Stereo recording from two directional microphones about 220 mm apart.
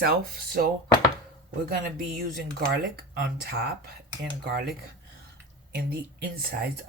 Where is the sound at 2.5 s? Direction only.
45° right (ahead or behind).